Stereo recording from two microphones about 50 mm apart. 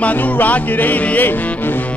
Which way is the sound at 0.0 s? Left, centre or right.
Left.